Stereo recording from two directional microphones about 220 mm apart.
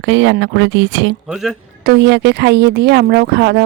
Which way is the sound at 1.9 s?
50° right (ahead or behind).